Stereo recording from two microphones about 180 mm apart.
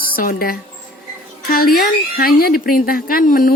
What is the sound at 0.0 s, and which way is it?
A woman's voice, 50° left (ahead or behind).